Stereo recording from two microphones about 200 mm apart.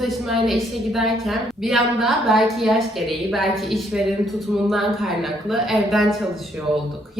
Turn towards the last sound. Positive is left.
turn(degrees=0)  # may be behind; listen again after turning